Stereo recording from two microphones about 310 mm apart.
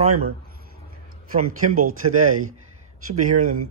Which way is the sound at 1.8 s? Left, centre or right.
Right.